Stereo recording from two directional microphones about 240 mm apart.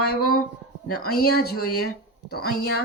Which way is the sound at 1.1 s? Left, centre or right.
Left.